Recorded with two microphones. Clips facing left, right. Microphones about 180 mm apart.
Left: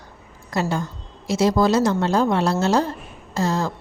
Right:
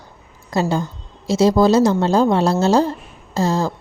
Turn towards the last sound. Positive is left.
turn(degrees=-30)  # may be behind; listen again after turning